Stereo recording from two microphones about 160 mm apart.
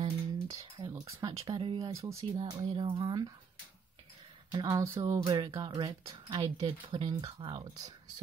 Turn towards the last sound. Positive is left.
turn(degrees=-25)  # may be behind; listen again after turning